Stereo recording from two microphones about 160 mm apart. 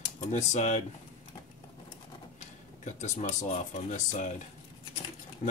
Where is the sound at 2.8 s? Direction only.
50° left (ahead or behind).